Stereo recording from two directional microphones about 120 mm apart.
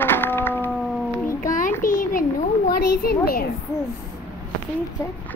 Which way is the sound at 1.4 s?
90° left.